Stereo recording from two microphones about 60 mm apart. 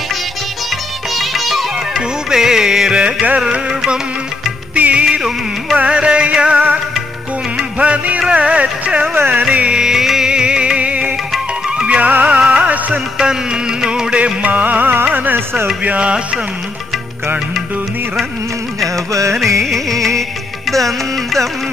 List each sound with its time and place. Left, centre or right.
1.1 s music: centre
7.8 s music: right
8.3 s a sound: right
9.3 s music: centre
12.4 s music: centre
12.6 s music of bollywood: right
13.2 s music: centre; by 15.7 s right
15.8 s music: right
19.6 s music: centre